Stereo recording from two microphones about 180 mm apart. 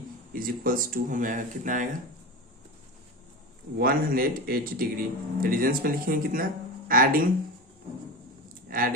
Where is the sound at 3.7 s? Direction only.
55° right (ahead or behind).